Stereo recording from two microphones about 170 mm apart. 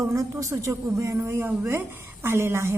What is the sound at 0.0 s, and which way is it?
A woman's voice, 15° right (ahead or behind).